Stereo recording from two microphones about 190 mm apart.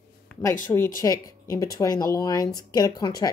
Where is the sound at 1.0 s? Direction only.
20° left (ahead or behind).